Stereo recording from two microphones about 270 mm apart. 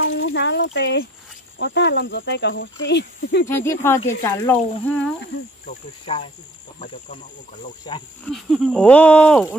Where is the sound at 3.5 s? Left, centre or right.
Centre.